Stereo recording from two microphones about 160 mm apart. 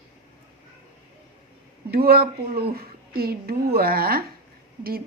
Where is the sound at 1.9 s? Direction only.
75° right (ahead or behind).